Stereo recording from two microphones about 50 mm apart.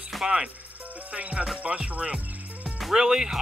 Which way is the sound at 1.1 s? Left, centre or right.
Right.